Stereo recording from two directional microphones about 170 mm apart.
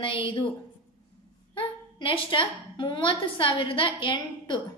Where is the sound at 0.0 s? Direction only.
30° left (ahead or behind).